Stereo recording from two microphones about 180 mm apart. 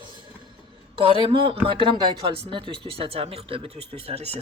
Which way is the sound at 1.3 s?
30° right (ahead or behind).